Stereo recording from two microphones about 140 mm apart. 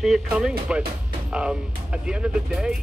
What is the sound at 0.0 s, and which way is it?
Speech, 5° right (ahead or behind).